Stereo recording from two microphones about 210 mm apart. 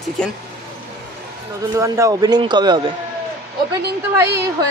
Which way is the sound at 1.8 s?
15° right (ahead or behind).